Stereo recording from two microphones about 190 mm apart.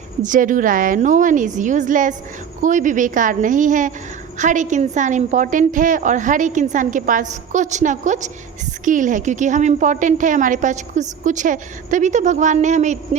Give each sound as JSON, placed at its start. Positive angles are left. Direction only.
{"t": 0.2, "sound": "a woman's voice", "side_deg": -45}